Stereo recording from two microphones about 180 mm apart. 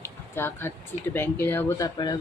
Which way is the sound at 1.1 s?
10° left (ahead or behind).